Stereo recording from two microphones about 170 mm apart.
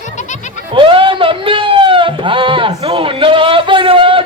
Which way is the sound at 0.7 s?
30° right (ahead or behind).